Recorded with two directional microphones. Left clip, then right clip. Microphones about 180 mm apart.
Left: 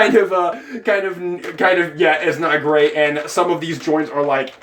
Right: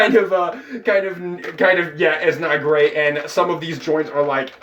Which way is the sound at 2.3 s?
15° left (ahead or behind).